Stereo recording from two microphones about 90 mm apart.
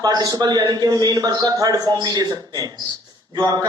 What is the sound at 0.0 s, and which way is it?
A man's voice, 45° right (ahead or behind).